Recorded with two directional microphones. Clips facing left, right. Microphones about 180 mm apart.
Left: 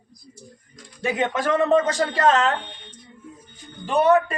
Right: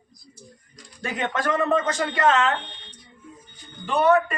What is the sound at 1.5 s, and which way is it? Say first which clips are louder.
Speech: left 5 dB; 25° left (ahead or behind).